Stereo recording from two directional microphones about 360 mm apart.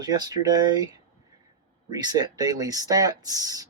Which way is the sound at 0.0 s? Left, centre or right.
Centre.